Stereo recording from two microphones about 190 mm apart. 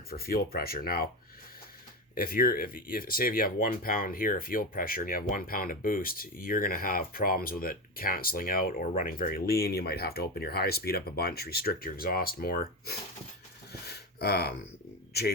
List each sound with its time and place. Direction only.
0.1 s speech: 50° left (ahead or behind)
2.1 s speech: 50° left (ahead or behind)
13.8 s a sound: 55° left (ahead or behind)
15.1 s a man's voice: 60° left (ahead or behind)